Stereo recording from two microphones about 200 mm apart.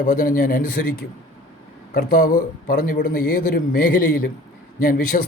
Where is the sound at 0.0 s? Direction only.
45° left (ahead or behind).